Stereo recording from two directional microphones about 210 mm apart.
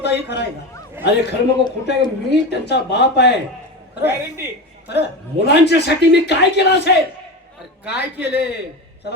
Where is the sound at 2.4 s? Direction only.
55° left (ahead or behind).